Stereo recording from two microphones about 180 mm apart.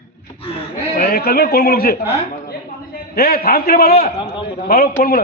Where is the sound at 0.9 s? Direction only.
55° left (ahead or behind).